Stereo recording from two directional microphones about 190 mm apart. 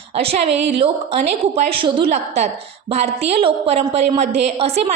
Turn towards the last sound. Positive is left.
turn(degrees=-30)  # may be behind; listen again after turning